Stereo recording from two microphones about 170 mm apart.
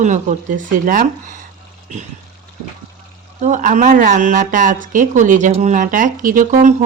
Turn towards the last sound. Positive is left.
turn(degrees=-50)  # may be behind; listen again after turning